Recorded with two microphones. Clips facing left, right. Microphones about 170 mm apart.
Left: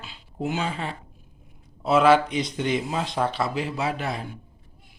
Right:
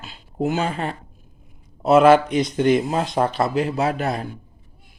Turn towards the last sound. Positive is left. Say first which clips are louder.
# right 6 dB
turn(degrees=-45)  # may be behind; listen again after turning